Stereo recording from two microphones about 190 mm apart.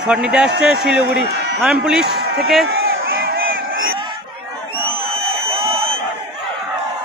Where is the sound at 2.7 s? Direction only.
55° right (ahead or behind).